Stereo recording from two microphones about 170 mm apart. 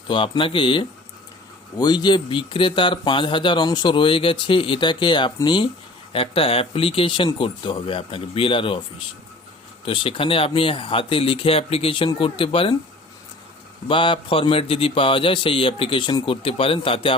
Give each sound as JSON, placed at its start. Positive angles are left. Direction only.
{"t": 0.1, "sound": "a man's voice", "side_deg": 30}
{"t": 9.8, "sound": "a man's voice", "side_deg": 30}
{"t": 13.8, "sound": "a man's voice", "side_deg": 30}